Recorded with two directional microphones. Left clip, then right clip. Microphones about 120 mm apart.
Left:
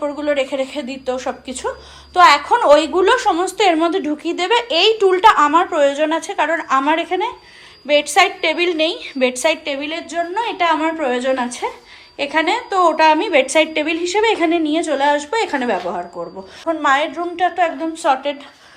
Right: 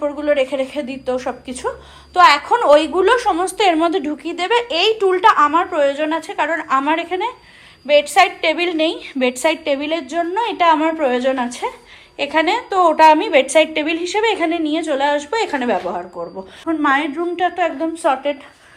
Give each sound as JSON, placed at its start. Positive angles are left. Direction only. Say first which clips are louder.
{"t": 0.2, "sound": "a woman's voice", "louder": "right 2 dB", "side_deg": 20}
{"t": 4.2, "sound": "speech", "louder": "left 1 dB", "side_deg": 30}
{"t": 7.9, "sound": "a woman's voice", "louder": "right 1 dB", "side_deg": 20}
{"t": 9.6, "sound": "a woman's voice", "louder": "right 4 dB", "side_deg": 0}
{"t": 17.2, "sound": "a woman's voice", "louder": "left 1 dB", "side_deg": 15}